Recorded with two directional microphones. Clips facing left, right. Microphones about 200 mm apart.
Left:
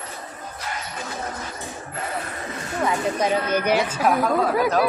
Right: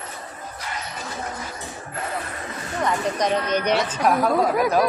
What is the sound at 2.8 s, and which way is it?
A woman's voice, 5° left (ahead or behind).